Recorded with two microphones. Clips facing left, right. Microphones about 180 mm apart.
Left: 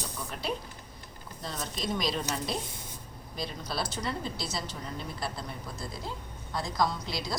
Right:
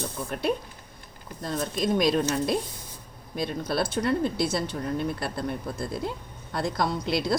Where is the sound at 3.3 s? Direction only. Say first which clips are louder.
Right 8 dB; 55° right (ahead or behind).